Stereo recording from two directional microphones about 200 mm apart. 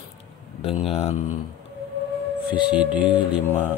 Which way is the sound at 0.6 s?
30° left (ahead or behind).